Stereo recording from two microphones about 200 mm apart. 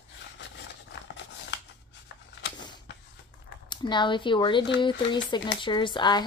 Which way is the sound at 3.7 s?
20° left (ahead or behind).